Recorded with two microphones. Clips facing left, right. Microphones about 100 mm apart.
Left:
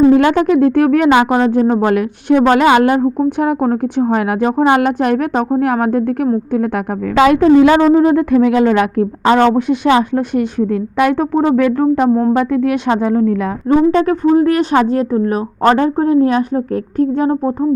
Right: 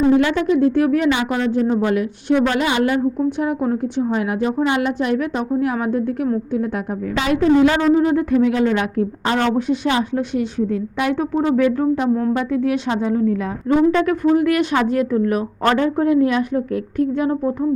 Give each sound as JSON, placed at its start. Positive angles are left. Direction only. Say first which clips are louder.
{"t": 0.1, "sound": "speech", "louder": "left 5 dB", "side_deg": 60}
{"t": 7.2, "sound": "speech", "louder": "left 6 dB", "side_deg": 70}
{"t": 9.6, "sound": "speech", "louder": "left 6 dB", "side_deg": 70}
{"t": 10.2, "sound": "speech", "louder": "left 5 dB", "side_deg": 55}
{"t": 12.1, "sound": "a woman's voice", "louder": "left 6 dB", "side_deg": 35}
{"t": 12.4, "sound": "speech", "louder": "left 5 dB", "side_deg": 60}
{"t": 13.7, "sound": "a woman's voice", "louder": "left 4 dB", "side_deg": 35}